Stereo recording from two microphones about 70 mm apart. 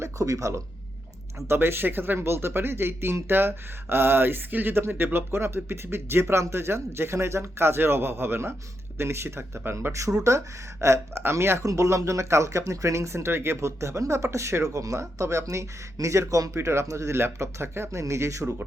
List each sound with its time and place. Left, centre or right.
0.0 s speech: right
1.5 s speech: right
11.7 s speech: right